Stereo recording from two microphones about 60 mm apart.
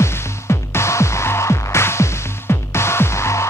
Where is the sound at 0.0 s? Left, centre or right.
Left.